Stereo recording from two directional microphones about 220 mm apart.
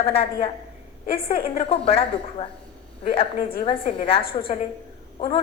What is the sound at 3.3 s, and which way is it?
Speech, 40° left (ahead or behind).